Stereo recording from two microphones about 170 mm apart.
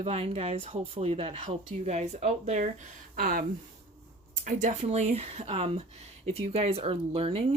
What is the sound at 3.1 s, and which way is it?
Speech, 60° right (ahead or behind).